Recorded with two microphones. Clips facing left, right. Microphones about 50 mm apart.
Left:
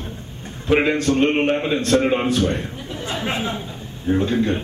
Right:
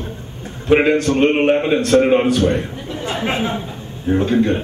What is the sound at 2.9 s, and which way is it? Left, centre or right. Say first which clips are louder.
Chatter: right 4 dB; right.